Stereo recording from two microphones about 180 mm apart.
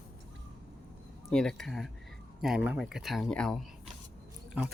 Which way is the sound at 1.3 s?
5° left (ahead or behind).